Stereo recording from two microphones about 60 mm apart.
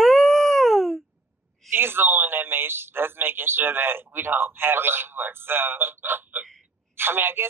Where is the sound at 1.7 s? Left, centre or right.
Right.